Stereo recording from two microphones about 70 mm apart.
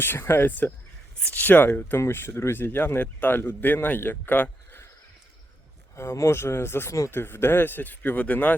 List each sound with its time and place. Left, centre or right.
0.0 s speech: left
6.0 s speech: left